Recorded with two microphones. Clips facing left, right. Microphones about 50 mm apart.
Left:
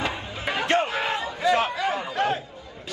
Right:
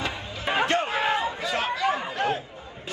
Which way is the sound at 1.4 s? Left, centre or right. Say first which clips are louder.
Left 4 dB; left.